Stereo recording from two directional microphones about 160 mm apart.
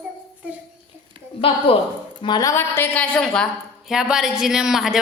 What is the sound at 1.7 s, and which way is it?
A woman's voice, 35° left (ahead or behind).